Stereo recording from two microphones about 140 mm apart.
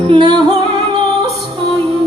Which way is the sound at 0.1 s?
35° right (ahead or behind).